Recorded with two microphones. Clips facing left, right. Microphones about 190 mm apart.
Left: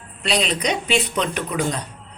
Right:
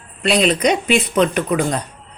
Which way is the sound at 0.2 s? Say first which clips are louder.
Right 7 dB; 55° right (ahead or behind).